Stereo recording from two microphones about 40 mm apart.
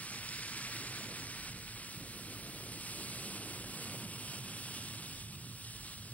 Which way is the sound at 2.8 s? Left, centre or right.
Left.